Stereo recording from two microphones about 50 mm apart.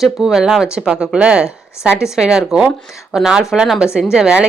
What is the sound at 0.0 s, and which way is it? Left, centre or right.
A woman's voice, centre.